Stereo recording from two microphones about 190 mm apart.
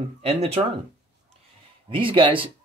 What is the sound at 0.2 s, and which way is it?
Speech, 35° right (ahead or behind).